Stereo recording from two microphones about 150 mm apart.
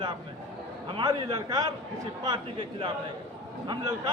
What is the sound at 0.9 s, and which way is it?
Speech, 30° right (ahead or behind).